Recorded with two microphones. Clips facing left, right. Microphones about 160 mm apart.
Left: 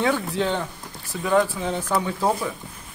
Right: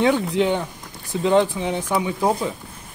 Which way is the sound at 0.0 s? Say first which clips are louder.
Right 4 dB; 20° right (ahead or behind).